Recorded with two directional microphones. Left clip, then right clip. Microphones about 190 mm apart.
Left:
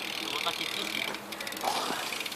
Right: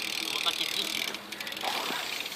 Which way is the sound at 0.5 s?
50° right (ahead or behind).